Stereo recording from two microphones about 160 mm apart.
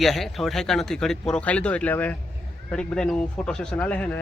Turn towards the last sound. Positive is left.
turn(degrees=10)  # may be behind; listen again after turning